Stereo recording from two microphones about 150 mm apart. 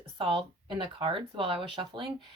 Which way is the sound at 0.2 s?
35° right (ahead or behind).